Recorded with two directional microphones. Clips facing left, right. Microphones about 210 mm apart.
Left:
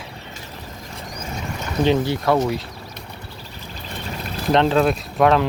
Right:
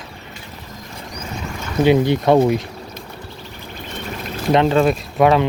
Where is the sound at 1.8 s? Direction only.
15° right (ahead or behind).